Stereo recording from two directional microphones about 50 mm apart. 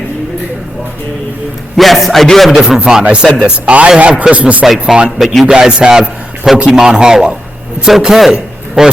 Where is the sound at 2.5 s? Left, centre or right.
Centre.